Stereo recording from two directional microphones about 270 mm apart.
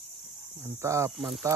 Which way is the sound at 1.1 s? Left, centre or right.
Centre.